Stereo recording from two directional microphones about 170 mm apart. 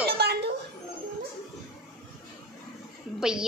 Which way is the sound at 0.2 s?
75° right (ahead or behind).